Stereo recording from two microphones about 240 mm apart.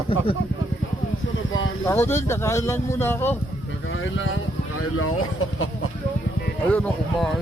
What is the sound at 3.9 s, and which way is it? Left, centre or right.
Speech, left.